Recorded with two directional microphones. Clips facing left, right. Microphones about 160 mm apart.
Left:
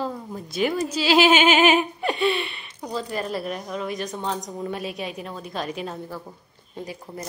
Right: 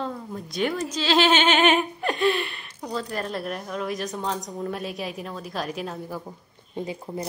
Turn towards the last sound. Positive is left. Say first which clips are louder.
# right 4 dB
turn(degrees=-20)  # may be behind; listen again after turning